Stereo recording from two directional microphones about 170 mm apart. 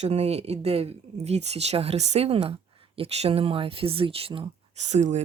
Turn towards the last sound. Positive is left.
turn(degrees=-45)  # may be behind; listen again after turning